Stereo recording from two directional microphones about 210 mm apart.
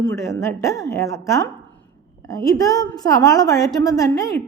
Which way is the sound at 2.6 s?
15° left (ahead or behind).